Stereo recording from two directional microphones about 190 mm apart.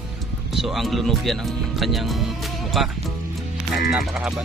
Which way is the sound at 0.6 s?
Centre (ahead or behind).